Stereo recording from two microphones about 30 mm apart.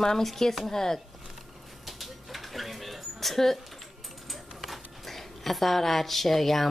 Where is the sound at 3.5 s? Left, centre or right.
Centre.